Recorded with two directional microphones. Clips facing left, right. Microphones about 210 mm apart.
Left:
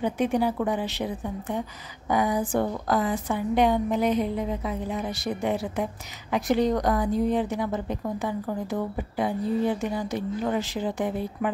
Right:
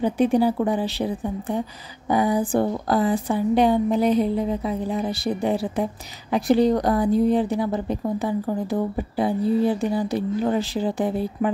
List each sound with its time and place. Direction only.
0.0 s a woman's voice: 35° right (ahead or behind)